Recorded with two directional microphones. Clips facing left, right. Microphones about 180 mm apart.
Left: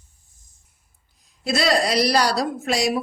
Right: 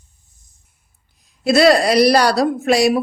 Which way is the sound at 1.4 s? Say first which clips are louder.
Right 8 dB; 65° right (ahead or behind).